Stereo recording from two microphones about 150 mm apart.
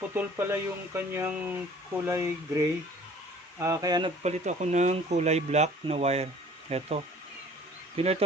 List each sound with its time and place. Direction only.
0.1 s speech: 15° right (ahead or behind)
4.2 s speech: 50° right (ahead or behind)